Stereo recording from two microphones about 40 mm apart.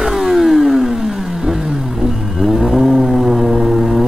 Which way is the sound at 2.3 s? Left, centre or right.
Centre.